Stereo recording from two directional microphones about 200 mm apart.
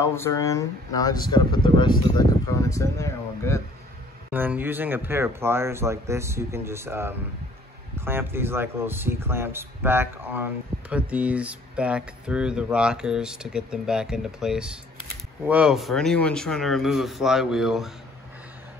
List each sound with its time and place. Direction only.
0.0 s speech: 15° left (ahead or behind)
4.3 s speech: 10° right (ahead or behind)